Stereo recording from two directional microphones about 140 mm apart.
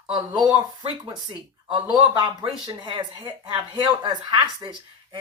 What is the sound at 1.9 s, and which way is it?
Speech, 30° right (ahead or behind).